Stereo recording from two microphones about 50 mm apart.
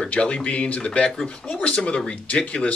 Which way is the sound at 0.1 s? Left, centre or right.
Left.